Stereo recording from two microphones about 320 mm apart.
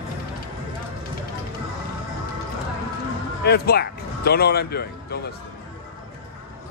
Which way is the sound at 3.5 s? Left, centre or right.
Left.